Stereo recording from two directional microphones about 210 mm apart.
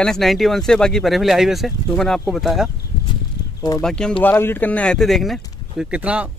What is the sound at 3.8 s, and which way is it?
Speech, 5° left (ahead or behind).